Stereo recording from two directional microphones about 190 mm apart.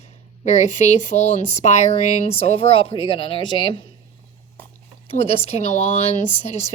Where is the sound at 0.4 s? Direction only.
35° left (ahead or behind).